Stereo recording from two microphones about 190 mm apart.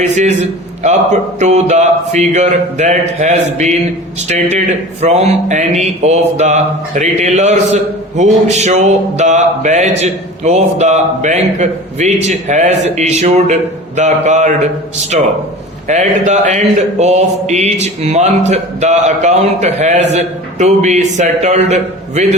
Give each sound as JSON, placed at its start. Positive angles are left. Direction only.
{"t": 0.8, "sound": "speech", "side_deg": -35}